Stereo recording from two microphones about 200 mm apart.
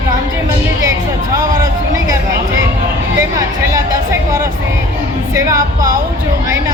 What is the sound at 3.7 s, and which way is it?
Music, 15° right (ahead or behind).